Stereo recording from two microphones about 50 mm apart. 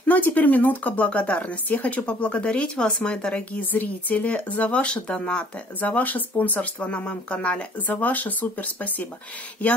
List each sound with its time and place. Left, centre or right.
0.0 s speech: left
3.7 s speech: left; by 5.5 s centre
5.8 s speech: left
7.9 s speech: left